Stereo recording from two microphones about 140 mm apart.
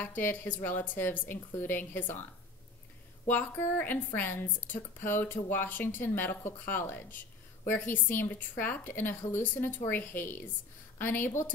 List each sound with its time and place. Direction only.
0.0 s a woman's voice: 15° left (ahead or behind)
3.3 s a woman's voice: 15° left (ahead or behind)